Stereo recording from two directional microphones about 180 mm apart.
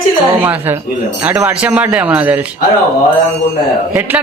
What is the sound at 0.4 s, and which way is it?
Speech, 10° right (ahead or behind).